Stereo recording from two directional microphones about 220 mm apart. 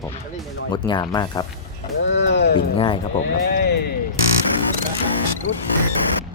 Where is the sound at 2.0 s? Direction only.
55° left (ahead or behind).